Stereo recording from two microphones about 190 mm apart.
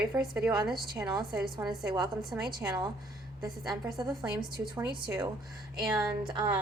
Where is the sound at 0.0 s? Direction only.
5° right (ahead or behind).